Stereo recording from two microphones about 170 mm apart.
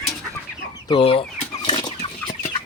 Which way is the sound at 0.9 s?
30° left (ahead or behind).